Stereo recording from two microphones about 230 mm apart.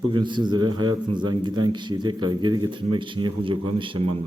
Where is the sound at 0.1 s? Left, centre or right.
Centre.